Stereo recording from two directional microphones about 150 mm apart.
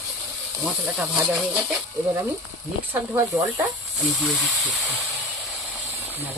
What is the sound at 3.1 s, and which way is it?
Speech, 15° right (ahead or behind).